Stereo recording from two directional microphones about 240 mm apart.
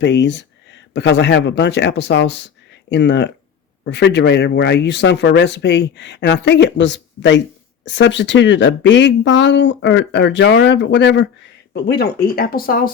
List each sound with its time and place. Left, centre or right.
0.0 s speech: left